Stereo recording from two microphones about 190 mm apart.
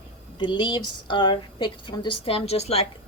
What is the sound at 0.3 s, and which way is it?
A woman's voice, 25° left (ahead or behind).